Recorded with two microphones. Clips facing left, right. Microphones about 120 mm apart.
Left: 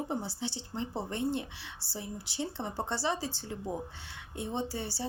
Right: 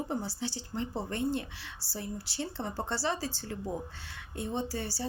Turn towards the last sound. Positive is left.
turn(degrees=20)  # may be behind; listen again after turning